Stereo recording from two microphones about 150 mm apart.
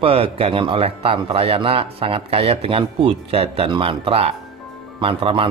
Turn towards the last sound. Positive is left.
turn(degrees=-35)  # may be behind; listen again after turning